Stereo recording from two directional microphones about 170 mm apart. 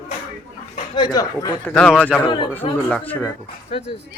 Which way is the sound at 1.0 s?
25° left (ahead or behind).